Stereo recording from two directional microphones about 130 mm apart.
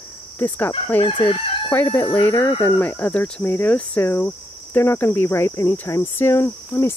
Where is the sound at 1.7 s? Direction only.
15° left (ahead or behind).